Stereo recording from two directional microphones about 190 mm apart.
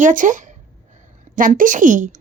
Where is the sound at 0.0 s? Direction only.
45° right (ahead or behind).